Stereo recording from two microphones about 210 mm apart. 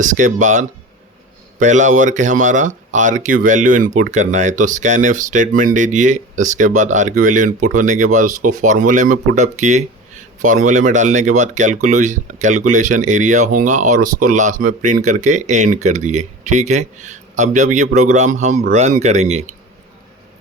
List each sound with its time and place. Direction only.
0.0 s speech: 35° right (ahead or behind)